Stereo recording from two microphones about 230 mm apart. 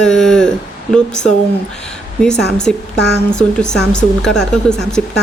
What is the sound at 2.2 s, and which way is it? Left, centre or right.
Speech, centre.